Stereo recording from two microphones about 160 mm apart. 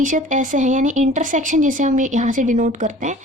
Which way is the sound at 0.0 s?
55° right (ahead or behind).